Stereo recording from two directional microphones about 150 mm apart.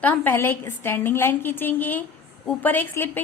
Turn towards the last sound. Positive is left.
turn(degrees=15)  # may be behind; listen again after turning